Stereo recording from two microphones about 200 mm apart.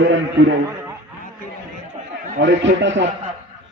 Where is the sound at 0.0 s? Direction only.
65° right (ahead or behind).